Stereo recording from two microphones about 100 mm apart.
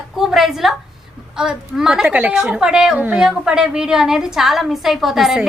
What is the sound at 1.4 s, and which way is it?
A woman's voice, 5° right (ahead or behind).